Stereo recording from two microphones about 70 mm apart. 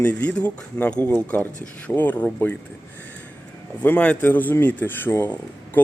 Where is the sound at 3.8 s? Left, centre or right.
Centre.